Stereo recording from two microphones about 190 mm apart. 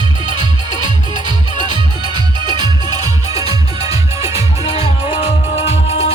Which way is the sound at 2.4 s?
25° right (ahead or behind).